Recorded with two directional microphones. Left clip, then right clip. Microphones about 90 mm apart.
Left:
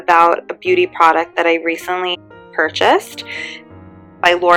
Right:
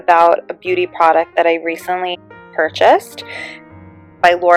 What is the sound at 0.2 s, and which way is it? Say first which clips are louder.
Speech: right 1 dB; 80° right.